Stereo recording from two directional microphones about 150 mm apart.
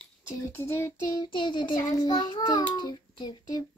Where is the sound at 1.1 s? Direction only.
30° left (ahead or behind).